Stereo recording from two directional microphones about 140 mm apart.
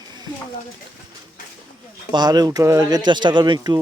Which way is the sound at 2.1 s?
30° right (ahead or behind).